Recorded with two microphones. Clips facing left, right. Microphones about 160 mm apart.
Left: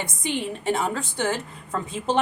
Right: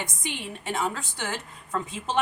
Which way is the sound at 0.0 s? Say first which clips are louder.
Left 7 dB; 30° left (ahead or behind).